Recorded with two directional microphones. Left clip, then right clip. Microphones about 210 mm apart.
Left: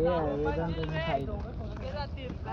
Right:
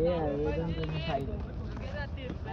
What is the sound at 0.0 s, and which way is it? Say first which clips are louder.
Speech: left 1 dB; 10° left (ahead or behind).